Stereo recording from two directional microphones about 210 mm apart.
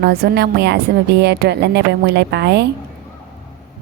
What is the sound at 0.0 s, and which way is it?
A woman's voice, 50° right (ahead or behind).